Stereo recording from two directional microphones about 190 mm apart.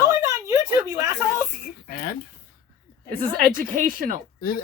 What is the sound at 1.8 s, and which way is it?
Speech, 50° left (ahead or behind).